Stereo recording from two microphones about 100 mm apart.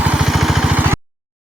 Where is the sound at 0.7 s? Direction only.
20° right (ahead or behind).